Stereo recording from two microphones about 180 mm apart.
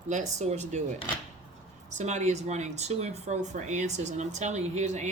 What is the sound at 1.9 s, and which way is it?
Speech, 40° right (ahead or behind).